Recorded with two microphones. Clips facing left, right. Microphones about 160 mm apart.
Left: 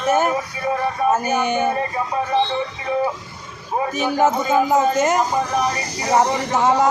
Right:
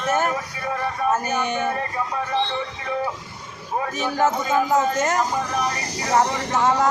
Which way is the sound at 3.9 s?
15° left (ahead or behind).